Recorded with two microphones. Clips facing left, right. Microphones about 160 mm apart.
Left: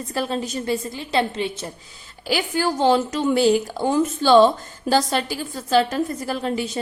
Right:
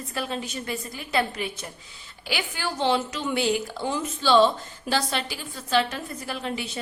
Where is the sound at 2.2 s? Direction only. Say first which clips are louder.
Left 8 dB; 40° left (ahead or behind).